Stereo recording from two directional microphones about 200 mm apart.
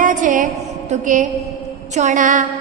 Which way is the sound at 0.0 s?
40° right (ahead or behind).